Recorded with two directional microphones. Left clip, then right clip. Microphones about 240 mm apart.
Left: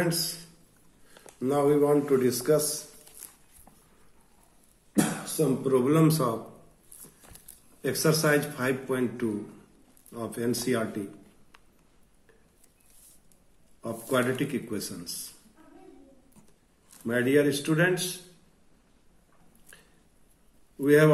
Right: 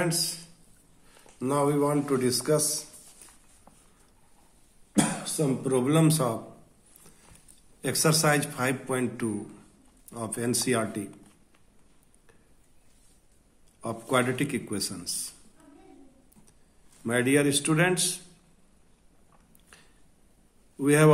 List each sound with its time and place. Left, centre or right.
1.4 s a man's voice: right
4.9 s speech: right
7.8 s a man's voice: right
13.7 s a man's voice: right
17.0 s a man's voice: right
20.8 s a man's voice: right